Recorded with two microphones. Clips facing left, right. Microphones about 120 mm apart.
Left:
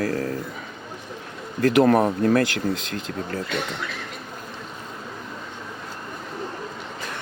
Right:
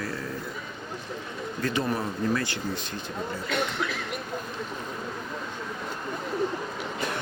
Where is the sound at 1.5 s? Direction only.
75° left (ahead or behind).